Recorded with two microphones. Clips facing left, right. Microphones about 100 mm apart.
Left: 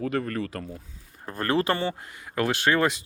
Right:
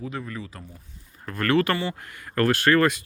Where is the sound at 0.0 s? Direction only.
60° left (ahead or behind); by 0.8 s 75° left (ahead or behind).